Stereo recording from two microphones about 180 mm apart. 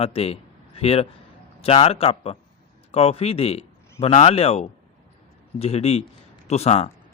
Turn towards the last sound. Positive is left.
turn(degrees=35)  # may be behind; listen again after turning